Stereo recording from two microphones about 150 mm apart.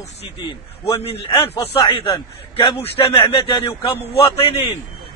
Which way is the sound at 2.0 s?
35° left (ahead or behind).